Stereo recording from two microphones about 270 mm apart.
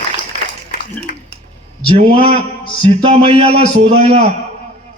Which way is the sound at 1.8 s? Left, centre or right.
Centre.